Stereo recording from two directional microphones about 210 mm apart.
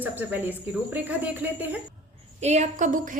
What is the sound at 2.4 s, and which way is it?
Speech, 30° right (ahead or behind).